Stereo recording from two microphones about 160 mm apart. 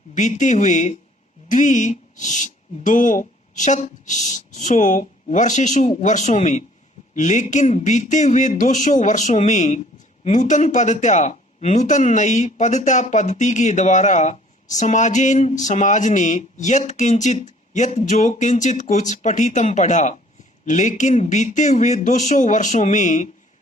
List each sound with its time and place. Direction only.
0.1 s speech: 50° left (ahead or behind)